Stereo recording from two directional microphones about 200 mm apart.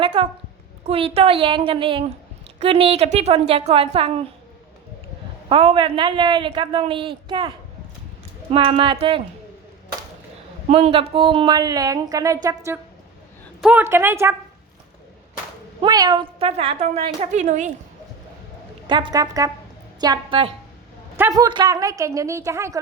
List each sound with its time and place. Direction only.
0.0 s a woman's voice: 25° right (ahead or behind)
5.5 s a woman's voice: 25° right (ahead or behind)
10.7 s a woman's voice: 30° right (ahead or behind); by 14.3 s 10° right (ahead or behind)
15.8 s a woman's voice: 20° right (ahead or behind); by 17.7 s 35° right (ahead or behind)
18.9 s a woman's voice: 25° right (ahead or behind)